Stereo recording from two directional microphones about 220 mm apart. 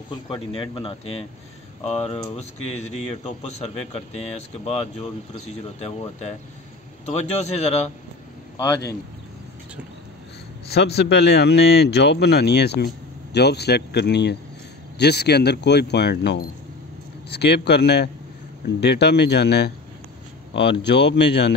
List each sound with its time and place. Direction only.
0.1 s a man's voice: 20° left (ahead or behind)
10.7 s speech: 45° left (ahead or behind)